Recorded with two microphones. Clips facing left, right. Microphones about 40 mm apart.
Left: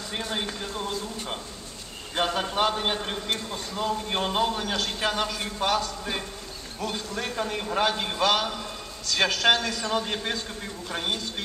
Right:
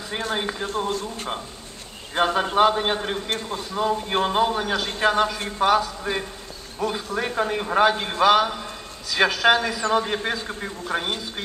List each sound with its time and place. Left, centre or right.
0.4 s a man's voice: centre
2.1 s a man's voice: centre
7.7 s a man's voice: centre